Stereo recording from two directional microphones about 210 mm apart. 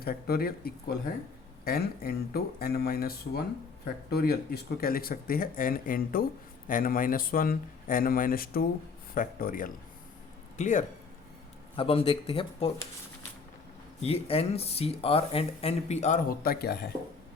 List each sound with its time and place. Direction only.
0.0 s speech: 45° left (ahead or behind)
11.8 s speech: 25° left (ahead or behind)
14.0 s speech: 30° left (ahead or behind); by 16.7 s 45° left (ahead or behind)